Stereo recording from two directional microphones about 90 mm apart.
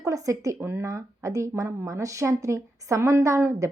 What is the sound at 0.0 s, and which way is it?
Speech, 40° right (ahead or behind).